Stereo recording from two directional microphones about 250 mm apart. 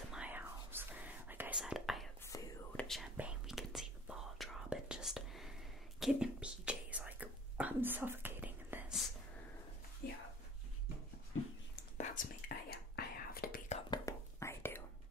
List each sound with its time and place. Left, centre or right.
0.1 s whispering: centre
10.0 s a sound: left
11.7 s whispering: left; by 14.8 s centre